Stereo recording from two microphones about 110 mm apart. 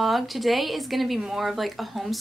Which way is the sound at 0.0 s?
Centre (ahead or behind).